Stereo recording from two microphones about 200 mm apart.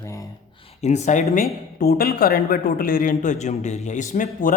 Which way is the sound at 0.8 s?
35° left (ahead or behind).